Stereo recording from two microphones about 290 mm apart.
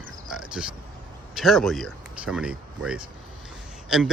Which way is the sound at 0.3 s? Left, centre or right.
Centre.